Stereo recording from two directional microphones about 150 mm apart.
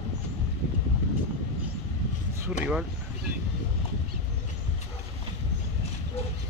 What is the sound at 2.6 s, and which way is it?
Speech, 5° right (ahead or behind).